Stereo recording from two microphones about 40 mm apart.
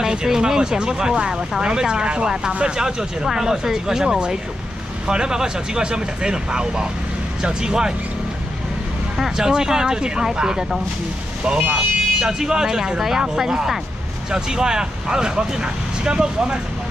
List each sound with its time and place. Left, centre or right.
0.1 s speech: centre
9.2 s speech: centre
11.7 s speech: centre